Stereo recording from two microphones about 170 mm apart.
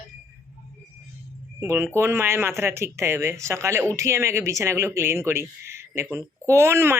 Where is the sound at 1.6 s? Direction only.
15° right (ahead or behind).